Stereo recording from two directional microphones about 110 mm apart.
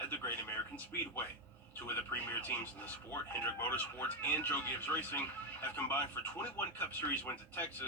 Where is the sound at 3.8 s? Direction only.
15° left (ahead or behind).